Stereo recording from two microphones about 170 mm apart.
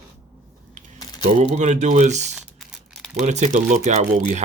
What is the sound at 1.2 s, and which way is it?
Speech, 45° right (ahead or behind).